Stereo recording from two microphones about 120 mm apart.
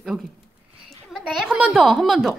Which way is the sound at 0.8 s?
Centre (ahead or behind).